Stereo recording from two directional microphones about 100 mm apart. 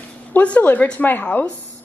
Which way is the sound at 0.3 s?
15° left (ahead or behind).